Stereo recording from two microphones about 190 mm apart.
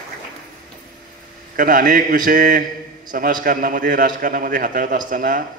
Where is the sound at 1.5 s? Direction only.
45° right (ahead or behind).